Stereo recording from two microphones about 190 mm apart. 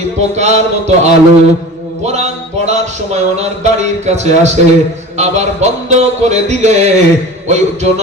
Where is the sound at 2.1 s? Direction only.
35° right (ahead or behind).